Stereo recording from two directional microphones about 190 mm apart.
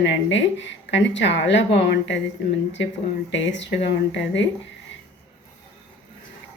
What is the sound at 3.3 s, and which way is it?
Speech, 70° left (ahead or behind).